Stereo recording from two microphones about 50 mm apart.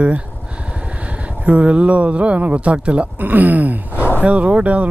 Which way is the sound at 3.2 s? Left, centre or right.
Right.